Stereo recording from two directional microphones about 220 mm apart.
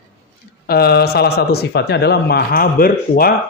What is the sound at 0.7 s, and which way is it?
Speech, 45° left (ahead or behind).